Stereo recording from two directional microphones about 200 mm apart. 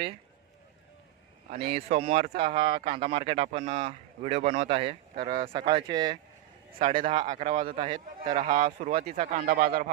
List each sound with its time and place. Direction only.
1.6 s speech: 30° right (ahead or behind)
7.3 s a man's voice: 35° right (ahead or behind)
8.4 s speech: 40° right (ahead or behind)
9.0 s a man's voice: 30° right (ahead or behind); by 9.9 s 50° right (ahead or behind)